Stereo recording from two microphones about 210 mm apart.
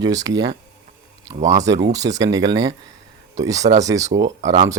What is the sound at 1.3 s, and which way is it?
Speech, 15° right (ahead or behind).